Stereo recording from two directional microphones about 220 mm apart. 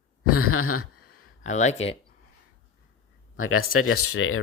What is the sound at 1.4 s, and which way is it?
Speech, 30° left (ahead or behind).